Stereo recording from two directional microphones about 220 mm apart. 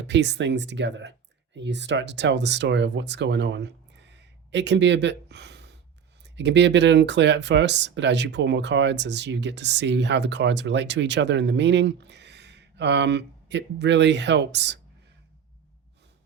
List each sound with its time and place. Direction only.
0.1 s speech: 50° right (ahead or behind)